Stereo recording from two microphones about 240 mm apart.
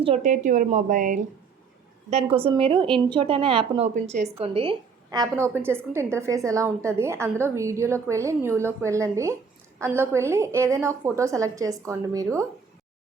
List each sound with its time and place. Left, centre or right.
0.0 s a woman's voice: right